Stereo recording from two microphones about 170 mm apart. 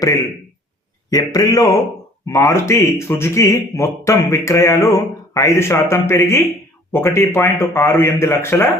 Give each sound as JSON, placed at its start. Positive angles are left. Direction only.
{"t": 1.1, "sound": "a man's voice", "side_deg": 20}